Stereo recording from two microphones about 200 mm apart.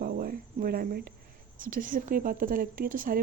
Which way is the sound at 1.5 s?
45° right (ahead or behind).